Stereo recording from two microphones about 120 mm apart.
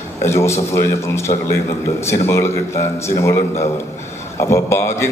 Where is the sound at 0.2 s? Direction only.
20° left (ahead or behind).